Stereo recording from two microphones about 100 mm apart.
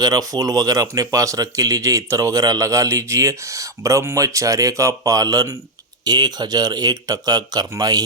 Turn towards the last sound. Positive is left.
turn(degrees=-40)  # may be behind; listen again after turning